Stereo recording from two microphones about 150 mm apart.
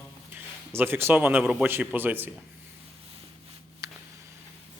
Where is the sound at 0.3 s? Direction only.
15° right (ahead or behind).